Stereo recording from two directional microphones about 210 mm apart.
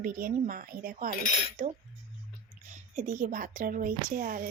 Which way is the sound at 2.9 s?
40° right (ahead or behind).